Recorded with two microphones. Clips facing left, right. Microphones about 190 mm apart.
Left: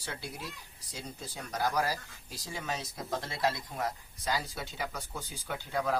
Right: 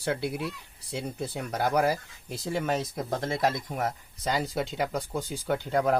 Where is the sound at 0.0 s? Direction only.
65° right (ahead or behind).